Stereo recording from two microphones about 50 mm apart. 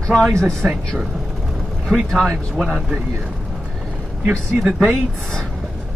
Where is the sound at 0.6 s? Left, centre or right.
Right.